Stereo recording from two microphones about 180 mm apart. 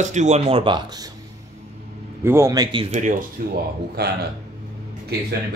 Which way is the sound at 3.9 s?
65° right (ahead or behind).